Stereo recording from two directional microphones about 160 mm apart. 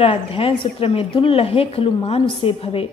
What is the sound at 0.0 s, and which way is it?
A woman's voice, 35° left (ahead or behind).